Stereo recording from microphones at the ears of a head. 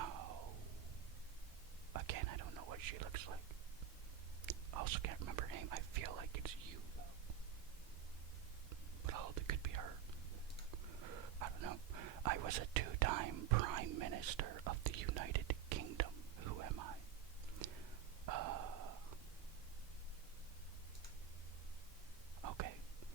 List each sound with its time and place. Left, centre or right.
0.0 s music: right
1.9 s whispering: right
4.4 s speech: right
9.0 s whispering: right
18.3 s a sound: right
22.4 s whispering: right